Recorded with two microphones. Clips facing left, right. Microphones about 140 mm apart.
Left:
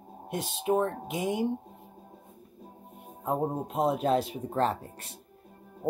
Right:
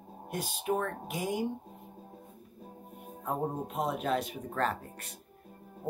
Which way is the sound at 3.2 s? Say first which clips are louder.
Left 4 dB; 25° left (ahead or behind).